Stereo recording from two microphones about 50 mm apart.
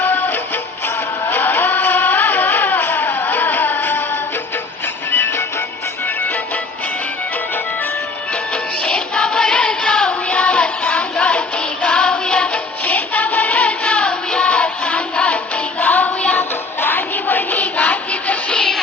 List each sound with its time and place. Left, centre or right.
0.0 s music: left
8.8 s music: centre
10.1 s music: left
12.8 s music: left
15.8 s hands: left
16.8 s music: left